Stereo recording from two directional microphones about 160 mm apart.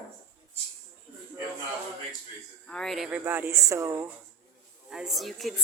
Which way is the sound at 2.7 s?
Centre (ahead or behind).